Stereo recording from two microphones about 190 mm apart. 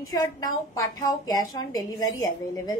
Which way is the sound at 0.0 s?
20° left (ahead or behind).